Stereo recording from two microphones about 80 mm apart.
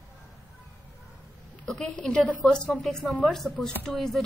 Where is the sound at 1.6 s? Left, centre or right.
Centre.